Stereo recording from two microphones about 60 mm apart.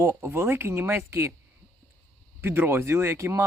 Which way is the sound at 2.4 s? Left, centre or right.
Right.